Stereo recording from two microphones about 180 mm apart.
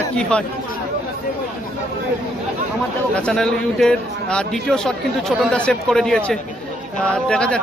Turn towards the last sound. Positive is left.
turn(degrees=5)  # may be behind; listen again after turning